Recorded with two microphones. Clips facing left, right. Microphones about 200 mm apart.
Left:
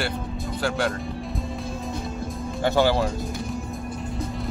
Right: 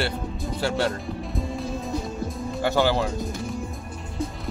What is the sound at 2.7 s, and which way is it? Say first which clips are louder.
Speech: left 2 dB; 15° left (ahead or behind).